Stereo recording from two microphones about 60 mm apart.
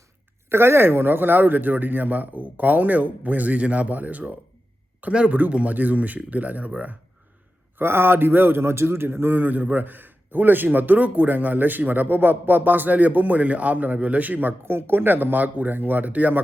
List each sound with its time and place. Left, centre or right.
0.5 s a man's voice: right
7.8 s a man's voice: right
14.6 s a man's voice: right